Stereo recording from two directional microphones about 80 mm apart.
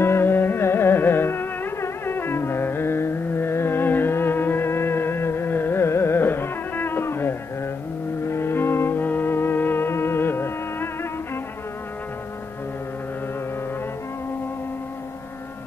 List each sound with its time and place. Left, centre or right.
0.0 s music: left